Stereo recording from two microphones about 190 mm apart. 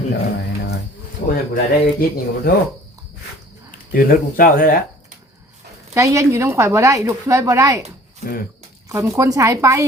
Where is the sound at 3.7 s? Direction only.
50° left (ahead or behind).